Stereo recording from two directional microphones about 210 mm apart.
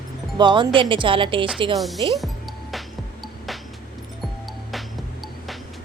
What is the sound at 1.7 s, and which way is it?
Speech, centre (ahead or behind).